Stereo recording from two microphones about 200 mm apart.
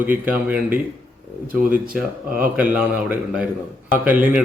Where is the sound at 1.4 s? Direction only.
45° right (ahead or behind).